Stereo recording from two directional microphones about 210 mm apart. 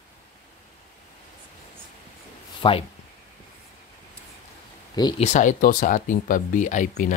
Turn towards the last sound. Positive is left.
turn(degrees=35)  # may be behind; listen again after turning